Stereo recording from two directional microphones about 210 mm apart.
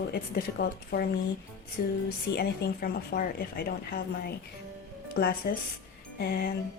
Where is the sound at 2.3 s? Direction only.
50° left (ahead or behind).